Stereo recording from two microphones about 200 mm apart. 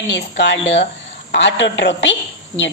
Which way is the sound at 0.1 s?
60° left (ahead or behind).